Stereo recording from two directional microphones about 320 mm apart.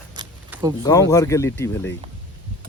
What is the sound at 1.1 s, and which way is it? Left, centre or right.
Speech, centre.